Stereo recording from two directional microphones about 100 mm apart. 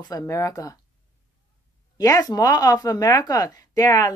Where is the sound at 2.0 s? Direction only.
35° left (ahead or behind).